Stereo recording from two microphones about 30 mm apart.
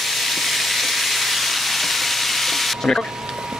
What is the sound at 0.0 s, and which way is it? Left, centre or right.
Frying, centre.